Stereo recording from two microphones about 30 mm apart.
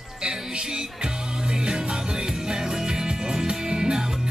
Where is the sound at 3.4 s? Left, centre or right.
Right.